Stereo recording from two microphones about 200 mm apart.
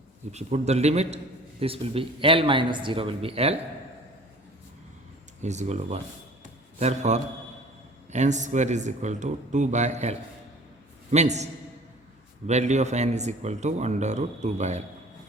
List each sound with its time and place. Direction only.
0.3 s a man's voice: 35° right (ahead or behind)
5.4 s speech: 35° right (ahead or behind)
12.5 s speech: 35° right (ahead or behind)